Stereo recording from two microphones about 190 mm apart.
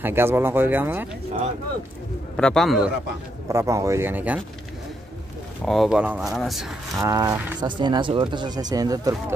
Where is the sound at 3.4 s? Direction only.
15° right (ahead or behind).